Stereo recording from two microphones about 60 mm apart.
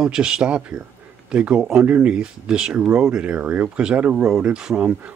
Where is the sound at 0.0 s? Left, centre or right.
Centre.